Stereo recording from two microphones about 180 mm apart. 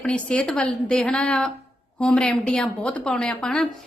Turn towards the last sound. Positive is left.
turn(degrees=5)  # may be behind; listen again after turning